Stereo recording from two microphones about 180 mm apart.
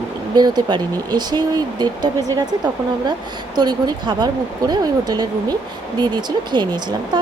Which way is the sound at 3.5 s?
25° right (ahead or behind).